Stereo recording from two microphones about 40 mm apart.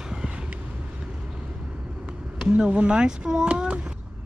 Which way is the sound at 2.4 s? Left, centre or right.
Right.